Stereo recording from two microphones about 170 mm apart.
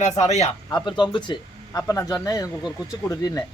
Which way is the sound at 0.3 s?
40° left (ahead or behind).